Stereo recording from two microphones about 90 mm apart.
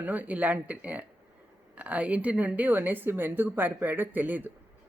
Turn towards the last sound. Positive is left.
turn(degrees=-20)  # may be behind; listen again after turning